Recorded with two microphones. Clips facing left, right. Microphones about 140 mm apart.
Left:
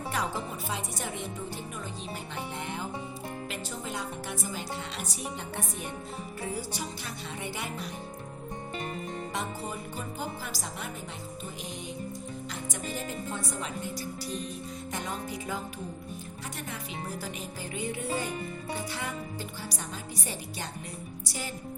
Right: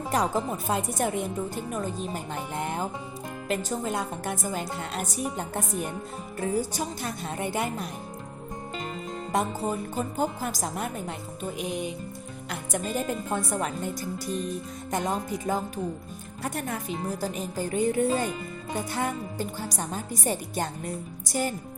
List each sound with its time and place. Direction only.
0.1 s speech: 40° right (ahead or behind)
9.3 s speech: 45° right (ahead or behind)
12.5 s speech: 55° right (ahead or behind)